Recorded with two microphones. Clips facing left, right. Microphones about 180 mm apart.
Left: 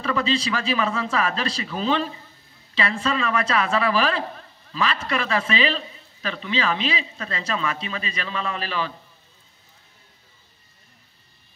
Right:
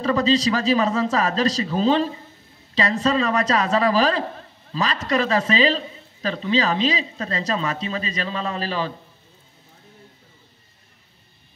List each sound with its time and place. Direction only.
0.0 s speech: 40° right (ahead or behind)